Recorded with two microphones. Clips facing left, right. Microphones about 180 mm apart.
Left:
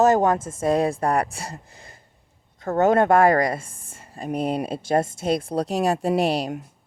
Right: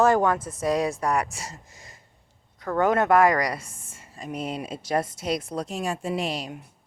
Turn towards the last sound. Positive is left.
turn(degrees=65)  # may be behind; listen again after turning